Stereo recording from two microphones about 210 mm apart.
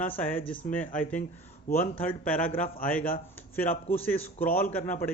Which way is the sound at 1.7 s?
45° left (ahead or behind).